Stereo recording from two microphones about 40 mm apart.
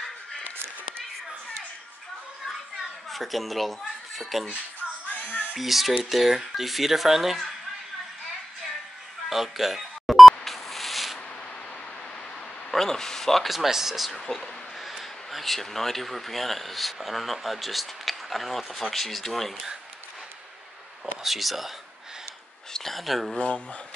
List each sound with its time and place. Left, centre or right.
3.1 s speech: centre
5.2 s a sound: left
5.6 s speech: centre
9.3 s a sound: centre
12.7 s speech: centre
13.5 s speech: centre
14.2 s a sound: centre
15.3 s speech: centre
21.0 s speech: centre
22.7 s a sound: centre
22.9 s speech: centre
23.3 s speech: centre